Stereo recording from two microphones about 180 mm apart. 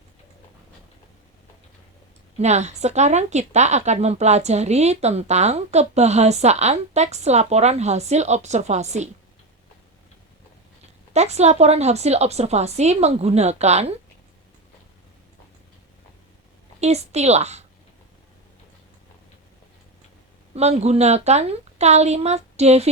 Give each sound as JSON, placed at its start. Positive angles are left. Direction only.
{"t": 2.4, "sound": "a woman's voice", "side_deg": -40}
{"t": 11.1, "sound": "a woman's voice", "side_deg": -40}
{"t": 16.8, "sound": "a woman's voice", "side_deg": -35}
{"t": 20.6, "sound": "a woman's voice", "side_deg": -35}